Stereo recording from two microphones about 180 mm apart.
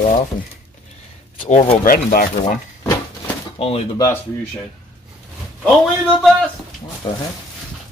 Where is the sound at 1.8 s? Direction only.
55° left (ahead or behind).